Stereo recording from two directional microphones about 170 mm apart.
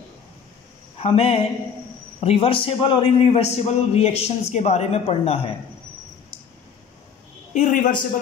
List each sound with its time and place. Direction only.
0.9 s a man's voice: 35° left (ahead or behind)
7.5 s a man's voice: 45° left (ahead or behind)